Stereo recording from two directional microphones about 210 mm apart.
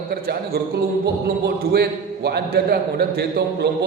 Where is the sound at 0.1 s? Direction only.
50° right (ahead or behind).